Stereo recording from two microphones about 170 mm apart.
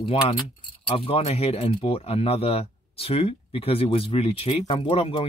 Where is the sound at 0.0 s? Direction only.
30° left (ahead or behind).